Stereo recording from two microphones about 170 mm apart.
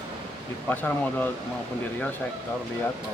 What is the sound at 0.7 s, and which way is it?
Speech, 10° left (ahead or behind).